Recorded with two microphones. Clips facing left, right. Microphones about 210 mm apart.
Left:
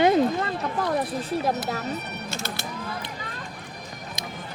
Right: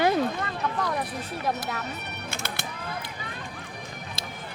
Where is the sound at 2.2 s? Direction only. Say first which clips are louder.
Left 2 dB; 55° right (ahead or behind).